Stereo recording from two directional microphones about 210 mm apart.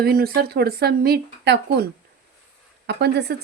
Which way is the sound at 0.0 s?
45° right (ahead or behind).